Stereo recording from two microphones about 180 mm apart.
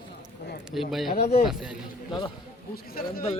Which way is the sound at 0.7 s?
Centre (ahead or behind).